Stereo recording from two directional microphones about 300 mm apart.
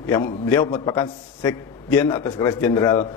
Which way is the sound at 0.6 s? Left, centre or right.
Centre.